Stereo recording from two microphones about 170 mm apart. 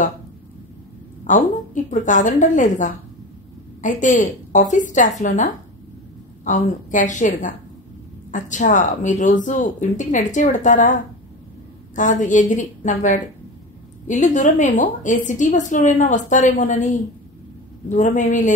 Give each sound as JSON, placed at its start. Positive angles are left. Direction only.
{"t": 1.2, "sound": "a woman's voice", "side_deg": 50}